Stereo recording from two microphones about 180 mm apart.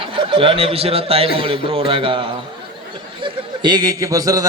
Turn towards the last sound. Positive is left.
turn(degrees=-20)  # may be behind; listen again after turning